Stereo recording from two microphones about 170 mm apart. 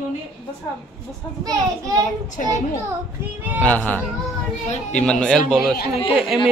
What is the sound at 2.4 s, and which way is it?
Speech, 45° left (ahead or behind).